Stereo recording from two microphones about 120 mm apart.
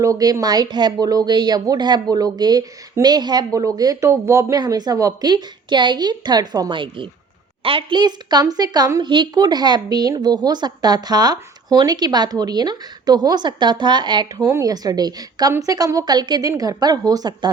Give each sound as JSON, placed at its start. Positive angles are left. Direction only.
{"t": 0.0, "sound": "speech", "side_deg": -30}
{"t": 4.6, "sound": "speech", "side_deg": -35}